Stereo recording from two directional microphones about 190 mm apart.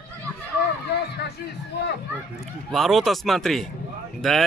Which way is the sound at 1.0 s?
60° left (ahead or behind).